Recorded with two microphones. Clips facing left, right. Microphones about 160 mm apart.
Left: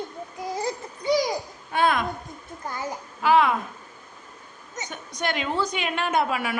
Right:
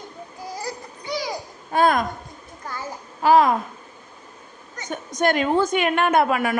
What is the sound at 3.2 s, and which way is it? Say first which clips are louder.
Speech: right 4 dB; 40° right (ahead or behind).